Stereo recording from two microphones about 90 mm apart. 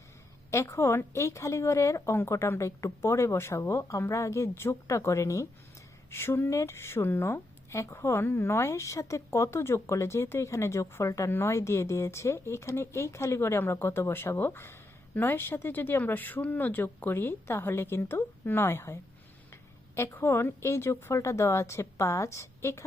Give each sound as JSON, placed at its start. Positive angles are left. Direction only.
{"t": 0.5, "sound": "a woman's voice", "side_deg": 30}
{"t": 20.0, "sound": "a woman's voice", "side_deg": 30}